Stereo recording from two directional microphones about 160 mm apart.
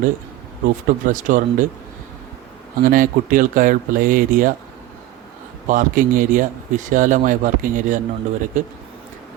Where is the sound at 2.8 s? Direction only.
60° right (ahead or behind).